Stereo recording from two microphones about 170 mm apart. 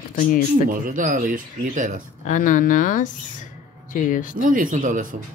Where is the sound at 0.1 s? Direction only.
55° left (ahead or behind).